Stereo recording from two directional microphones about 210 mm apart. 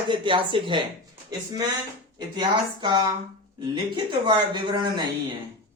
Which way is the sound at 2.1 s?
20° right (ahead or behind).